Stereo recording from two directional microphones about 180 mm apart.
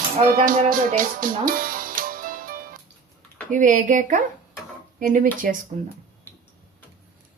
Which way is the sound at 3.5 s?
45° right (ahead or behind).